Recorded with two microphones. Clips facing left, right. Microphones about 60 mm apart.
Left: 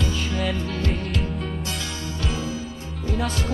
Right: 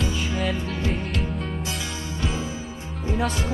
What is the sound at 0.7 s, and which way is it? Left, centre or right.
Music, centre.